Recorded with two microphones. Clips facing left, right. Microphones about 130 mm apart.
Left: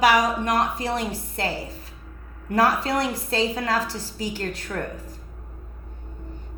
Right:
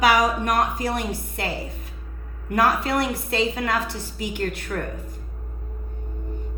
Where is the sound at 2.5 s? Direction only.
30° left (ahead or behind).